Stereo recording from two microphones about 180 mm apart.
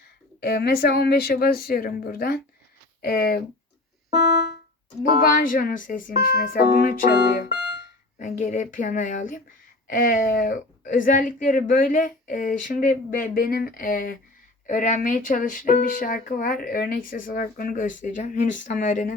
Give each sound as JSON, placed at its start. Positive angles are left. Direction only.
{"t": 0.3, "sound": "speech", "side_deg": 60}
{"t": 4.2, "sound": "music", "side_deg": 65}
{"t": 5.0, "sound": "speech", "side_deg": 50}
{"t": 8.2, "sound": "speech", "side_deg": 45}